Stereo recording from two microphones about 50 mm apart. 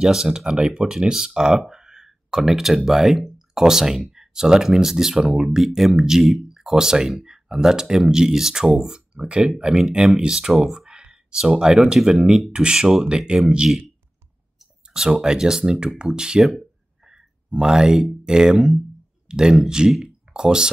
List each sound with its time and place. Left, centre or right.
0.0 s speech: centre
10.5 s speech: centre
15.0 s speech: centre
17.5 s speech: centre